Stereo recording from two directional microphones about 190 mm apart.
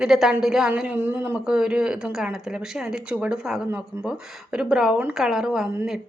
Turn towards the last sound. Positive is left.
turn(degrees=0)  # may be behind; listen again after turning